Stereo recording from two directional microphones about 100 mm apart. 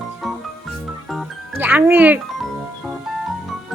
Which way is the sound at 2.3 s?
Centre (ahead or behind).